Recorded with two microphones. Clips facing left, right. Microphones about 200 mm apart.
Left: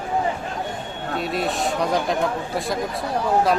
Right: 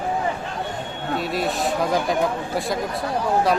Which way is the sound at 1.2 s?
Centre (ahead or behind).